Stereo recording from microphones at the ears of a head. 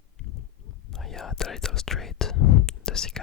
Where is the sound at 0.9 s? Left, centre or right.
Left.